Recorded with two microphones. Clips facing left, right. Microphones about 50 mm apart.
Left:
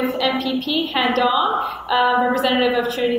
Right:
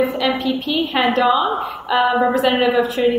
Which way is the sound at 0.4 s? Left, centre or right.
Centre.